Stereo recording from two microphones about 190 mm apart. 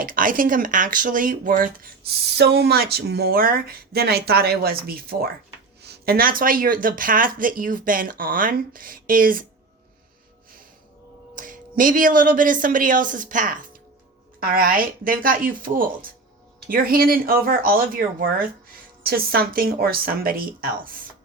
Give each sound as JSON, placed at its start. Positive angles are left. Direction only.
{"t": 0.0, "sound": "speech", "side_deg": -45}
{"t": 11.3, "sound": "speech", "side_deg": -45}